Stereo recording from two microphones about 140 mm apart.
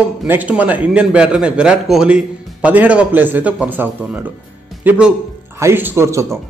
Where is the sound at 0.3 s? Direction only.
10° right (ahead or behind).